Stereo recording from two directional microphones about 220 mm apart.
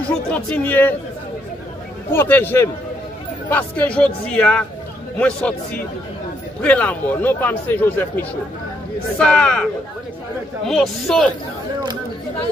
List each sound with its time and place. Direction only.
0.1 s speech: 5° left (ahead or behind)
2.1 s speech: 10° left (ahead or behind)
10.7 s speech: centre (ahead or behind)